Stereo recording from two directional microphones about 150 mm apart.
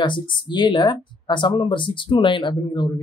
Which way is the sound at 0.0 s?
30° left (ahead or behind).